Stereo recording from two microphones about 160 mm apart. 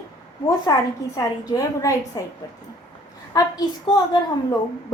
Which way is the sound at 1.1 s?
25° left (ahead or behind).